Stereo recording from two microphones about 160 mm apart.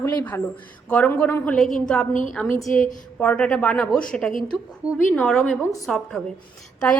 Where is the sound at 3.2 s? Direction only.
5° left (ahead or behind).